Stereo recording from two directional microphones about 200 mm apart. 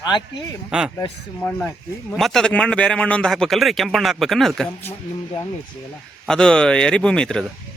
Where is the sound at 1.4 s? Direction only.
10° left (ahead or behind).